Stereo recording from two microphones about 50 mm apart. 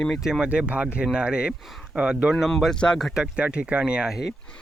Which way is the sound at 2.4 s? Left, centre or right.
Centre.